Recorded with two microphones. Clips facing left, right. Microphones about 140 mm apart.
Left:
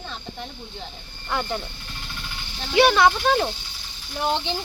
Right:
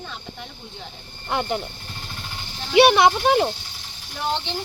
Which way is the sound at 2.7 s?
20° right (ahead or behind).